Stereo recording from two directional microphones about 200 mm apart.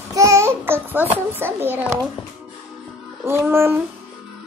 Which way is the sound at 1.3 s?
10° right (ahead or behind).